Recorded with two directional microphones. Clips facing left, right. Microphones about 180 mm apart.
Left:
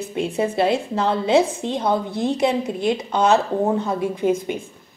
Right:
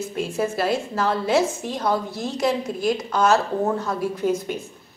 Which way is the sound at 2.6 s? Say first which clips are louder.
Left 1 dB; 20° left (ahead or behind).